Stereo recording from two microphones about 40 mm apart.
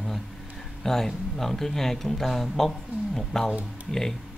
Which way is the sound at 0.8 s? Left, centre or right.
Centre.